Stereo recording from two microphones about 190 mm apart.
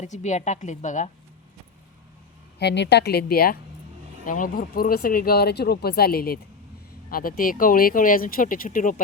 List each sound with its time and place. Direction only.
0.0 s a woman's voice: 40° left (ahead or behind)
2.6 s speech: 65° left (ahead or behind); by 9.0 s 45° left (ahead or behind)